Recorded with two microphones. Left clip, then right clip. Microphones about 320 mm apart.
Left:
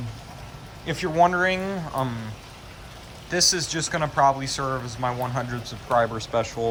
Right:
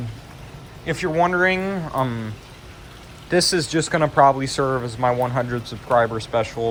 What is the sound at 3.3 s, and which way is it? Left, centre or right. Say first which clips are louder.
Speech: right 4 dB; centre.